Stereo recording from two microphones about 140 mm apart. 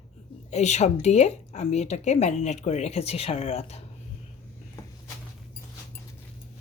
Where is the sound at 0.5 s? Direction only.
55° left (ahead or behind).